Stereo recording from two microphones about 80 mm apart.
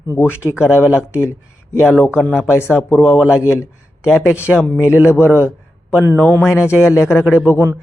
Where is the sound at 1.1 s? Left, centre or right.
Left.